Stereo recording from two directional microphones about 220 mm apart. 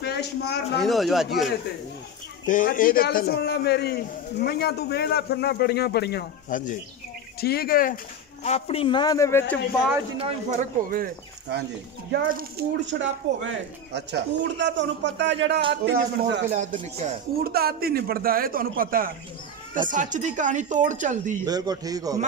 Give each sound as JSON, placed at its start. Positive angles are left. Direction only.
{"t": 0.0, "sound": "a man's voice", "side_deg": 50}
{"t": 0.7, "sound": "speech", "side_deg": 0}
{"t": 2.4, "sound": "a man's voice", "side_deg": 35}
{"t": 8.5, "sound": "speech", "side_deg": 30}
{"t": 10.2, "sound": "speech", "side_deg": -35}
{"t": 11.5, "sound": "speech", "side_deg": -50}
{"t": 14.6, "sound": "speech", "side_deg": -55}
{"t": 16.4, "sound": "speech", "side_deg": -30}
{"t": 21.5, "sound": "a man's voice", "side_deg": -15}